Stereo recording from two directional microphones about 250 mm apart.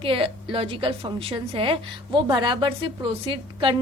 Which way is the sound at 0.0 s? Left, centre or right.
Right.